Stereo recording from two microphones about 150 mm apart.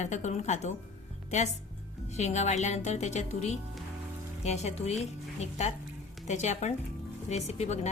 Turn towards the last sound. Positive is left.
turn(degrees=45)  # may be behind; listen again after turning